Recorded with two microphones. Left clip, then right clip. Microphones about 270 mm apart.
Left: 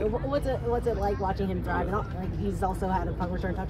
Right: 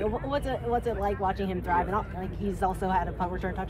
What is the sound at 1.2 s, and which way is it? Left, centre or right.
Speech, right.